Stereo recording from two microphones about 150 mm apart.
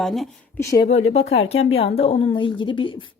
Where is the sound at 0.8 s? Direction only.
45° left (ahead or behind).